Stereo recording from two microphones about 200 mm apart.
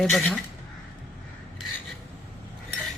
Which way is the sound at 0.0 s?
5° left (ahead or behind).